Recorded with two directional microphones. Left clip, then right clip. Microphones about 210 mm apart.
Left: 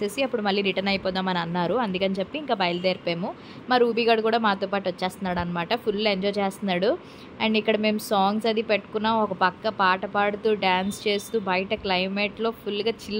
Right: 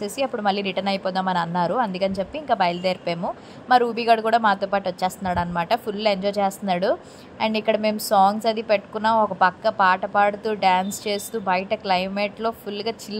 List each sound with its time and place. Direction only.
0.0 s a woman's voice: centre (ahead or behind)